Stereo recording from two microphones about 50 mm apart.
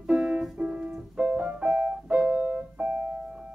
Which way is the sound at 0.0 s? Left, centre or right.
Centre.